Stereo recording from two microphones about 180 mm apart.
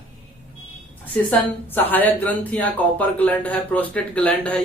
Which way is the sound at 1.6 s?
10° left (ahead or behind).